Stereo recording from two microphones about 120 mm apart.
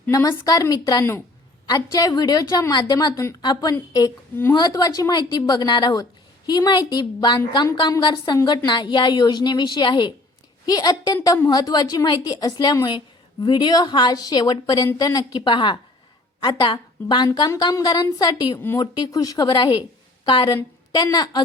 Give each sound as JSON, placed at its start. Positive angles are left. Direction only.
{"t": 0.1, "sound": "a woman's voice", "side_deg": 30}
{"t": 19.5, "sound": "a woman's voice", "side_deg": 45}